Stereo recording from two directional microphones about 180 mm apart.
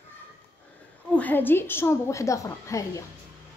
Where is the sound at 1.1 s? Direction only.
10° left (ahead or behind).